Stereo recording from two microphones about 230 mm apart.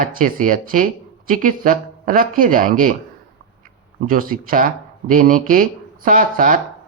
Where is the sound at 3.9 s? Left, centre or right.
Right.